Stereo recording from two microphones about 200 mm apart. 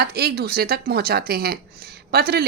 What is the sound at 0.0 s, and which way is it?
Speech, 50° right (ahead or behind).